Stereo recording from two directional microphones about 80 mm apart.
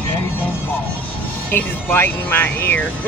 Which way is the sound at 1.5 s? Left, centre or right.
Left.